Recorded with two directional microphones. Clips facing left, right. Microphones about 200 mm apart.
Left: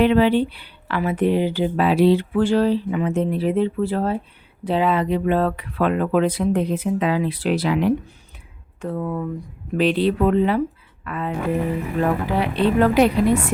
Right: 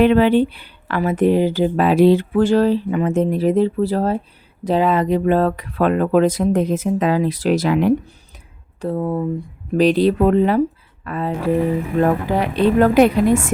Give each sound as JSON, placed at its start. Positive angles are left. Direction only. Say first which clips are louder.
{"t": 0.0, "sound": "speech", "louder": "right 3 dB", "side_deg": -50}
{"t": 8.8, "sound": "speech", "louder": "right 4 dB", "side_deg": -30}
{"t": 9.7, "sound": "speech", "louder": "right 4 dB", "side_deg": -40}
{"t": 12.4, "sound": "speech", "louder": "right 3 dB", "side_deg": -45}